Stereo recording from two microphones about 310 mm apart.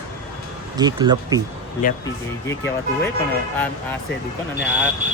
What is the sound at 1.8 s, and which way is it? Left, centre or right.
Speech, left.